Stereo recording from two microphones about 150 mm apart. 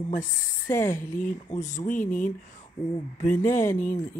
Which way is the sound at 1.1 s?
60° left (ahead or behind).